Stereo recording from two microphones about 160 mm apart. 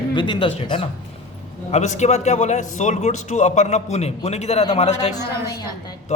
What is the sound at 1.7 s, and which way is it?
A man's voice, 45° left (ahead or behind).